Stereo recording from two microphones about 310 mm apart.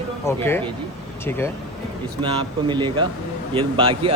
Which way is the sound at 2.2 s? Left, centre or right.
Centre.